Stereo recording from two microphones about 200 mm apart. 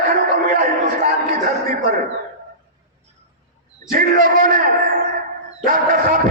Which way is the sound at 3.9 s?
45° right (ahead or behind).